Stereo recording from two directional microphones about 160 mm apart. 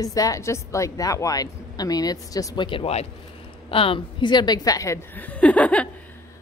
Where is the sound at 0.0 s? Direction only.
20° left (ahead or behind).